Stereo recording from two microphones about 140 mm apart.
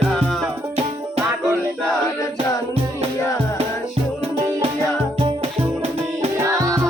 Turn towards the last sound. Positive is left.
turn(degrees=-25)  # may be behind; listen again after turning